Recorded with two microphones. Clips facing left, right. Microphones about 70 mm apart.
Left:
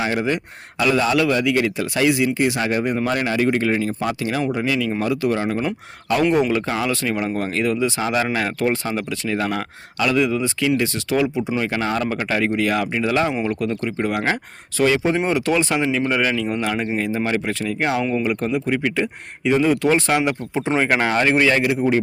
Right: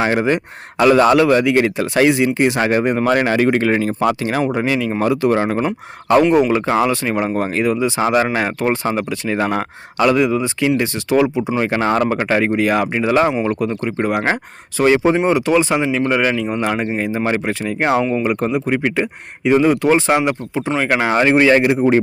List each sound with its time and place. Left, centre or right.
0.0 s speech: right
0.8 s speech: right
3.1 s speech: right
4.2 s speech: right
6.5 s speech: right
15.2 s speech: centre
20.8 s speech: centre
21.1 s speech: centre
21.5 s speech: right